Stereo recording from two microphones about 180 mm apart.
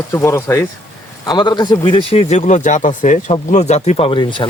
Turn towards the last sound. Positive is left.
turn(degrees=25)  # may be behind; listen again after turning